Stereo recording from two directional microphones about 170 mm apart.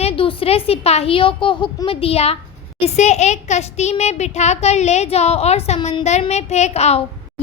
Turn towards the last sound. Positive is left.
turn(degrees=40)  # may be behind; listen again after turning